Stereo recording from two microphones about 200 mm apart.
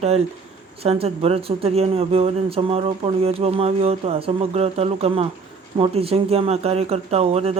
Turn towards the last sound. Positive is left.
turn(degrees=-30)  # may be behind; listen again after turning